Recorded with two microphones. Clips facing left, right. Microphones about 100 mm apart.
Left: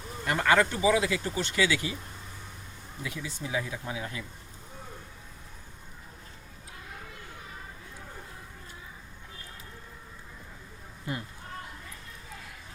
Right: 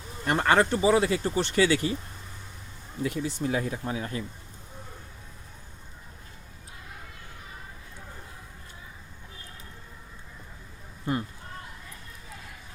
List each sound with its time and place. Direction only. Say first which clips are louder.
0.3 s speech: right 2 dB; 40° right (ahead or behind)
3.0 s speech: right 8 dB; 50° right (ahead or behind)